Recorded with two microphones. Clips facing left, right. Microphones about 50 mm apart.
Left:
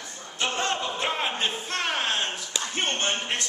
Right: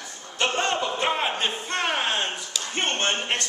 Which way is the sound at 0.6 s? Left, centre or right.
Centre.